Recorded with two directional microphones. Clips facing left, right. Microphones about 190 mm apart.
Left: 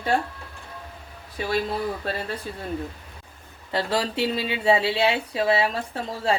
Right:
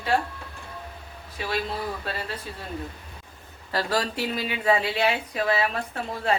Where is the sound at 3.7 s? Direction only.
25° left (ahead or behind).